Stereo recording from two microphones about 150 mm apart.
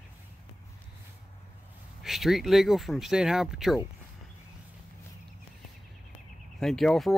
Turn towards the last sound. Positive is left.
turn(degrees=0)  # may be behind; listen again after turning